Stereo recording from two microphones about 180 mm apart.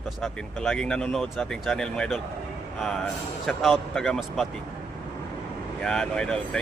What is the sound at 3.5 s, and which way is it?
Speech, centre (ahead or behind).